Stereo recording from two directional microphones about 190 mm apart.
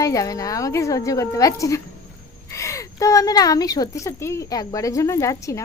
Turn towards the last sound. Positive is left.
turn(degrees=15)  # may be behind; listen again after turning